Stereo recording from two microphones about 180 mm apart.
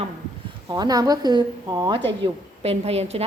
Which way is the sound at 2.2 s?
35° right (ahead or behind).